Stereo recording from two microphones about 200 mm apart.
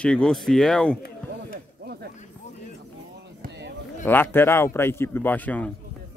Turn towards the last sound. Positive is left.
turn(degrees=10)  # may be behind; listen again after turning